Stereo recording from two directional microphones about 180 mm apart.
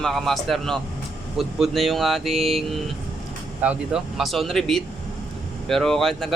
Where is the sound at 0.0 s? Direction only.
Centre (ahead or behind).